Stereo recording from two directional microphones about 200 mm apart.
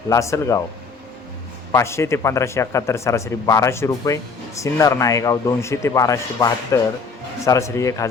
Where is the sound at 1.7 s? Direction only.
15° left (ahead or behind).